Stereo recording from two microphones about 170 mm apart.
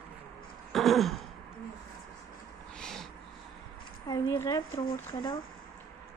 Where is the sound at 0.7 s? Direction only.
Centre (ahead or behind).